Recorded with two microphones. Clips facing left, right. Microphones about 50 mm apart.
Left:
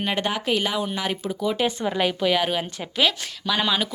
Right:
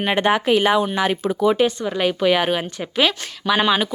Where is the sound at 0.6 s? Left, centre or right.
Right.